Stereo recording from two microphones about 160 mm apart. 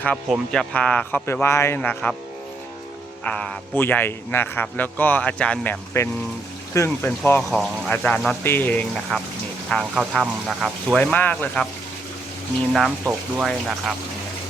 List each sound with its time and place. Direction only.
0.3 s speech: 5° left (ahead or behind)
3.2 s speech: 5° left (ahead or behind)
7.5 s speech: centre (ahead or behind)
12.7 s speech: centre (ahead or behind)